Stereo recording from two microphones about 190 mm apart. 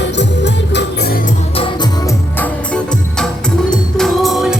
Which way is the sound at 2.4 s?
5° left (ahead or behind).